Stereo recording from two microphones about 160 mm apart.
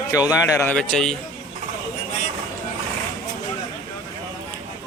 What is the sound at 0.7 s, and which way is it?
Speech, 5° left (ahead or behind).